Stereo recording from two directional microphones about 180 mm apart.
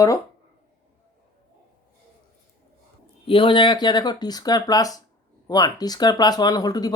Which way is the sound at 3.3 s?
30° left (ahead or behind).